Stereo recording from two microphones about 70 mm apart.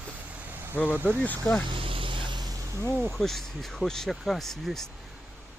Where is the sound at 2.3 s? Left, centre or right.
Right.